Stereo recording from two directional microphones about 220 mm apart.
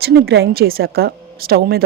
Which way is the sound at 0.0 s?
45° right (ahead or behind).